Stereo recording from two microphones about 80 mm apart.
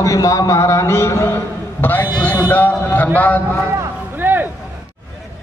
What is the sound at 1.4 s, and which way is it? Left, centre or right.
A man's voice, left.